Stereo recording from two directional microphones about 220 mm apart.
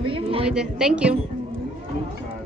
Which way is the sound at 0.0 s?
25° right (ahead or behind).